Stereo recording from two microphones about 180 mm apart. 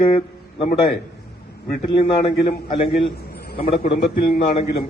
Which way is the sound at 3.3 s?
55° left (ahead or behind).